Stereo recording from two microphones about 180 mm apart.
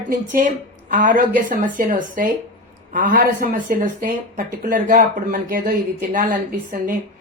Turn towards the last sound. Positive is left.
turn(degrees=-45)  # may be behind; listen again after turning